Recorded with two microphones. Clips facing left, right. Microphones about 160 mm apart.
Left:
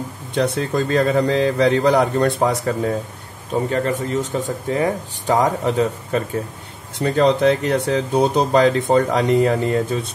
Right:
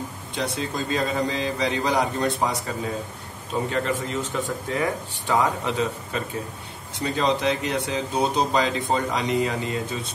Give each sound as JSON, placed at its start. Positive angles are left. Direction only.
{"t": 0.4, "sound": "a man's voice", "side_deg": 55}
{"t": 3.7, "sound": "speech", "side_deg": 40}